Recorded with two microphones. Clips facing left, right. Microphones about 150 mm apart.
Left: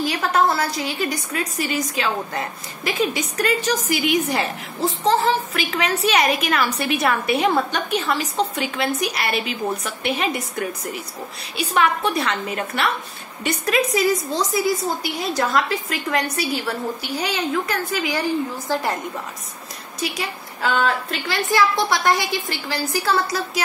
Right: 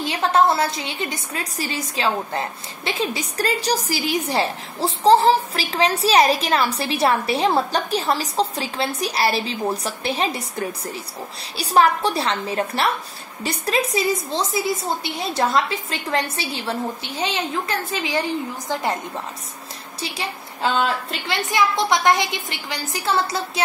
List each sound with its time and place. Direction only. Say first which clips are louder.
0.0 s a woman's voice: right 1 dB; 25° right (ahead or behind)
20.0 s a woman's voice: left 2 dB; 30° right (ahead or behind)